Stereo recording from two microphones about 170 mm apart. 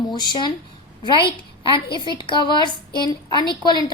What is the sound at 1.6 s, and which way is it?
A woman's voice, 30° left (ahead or behind).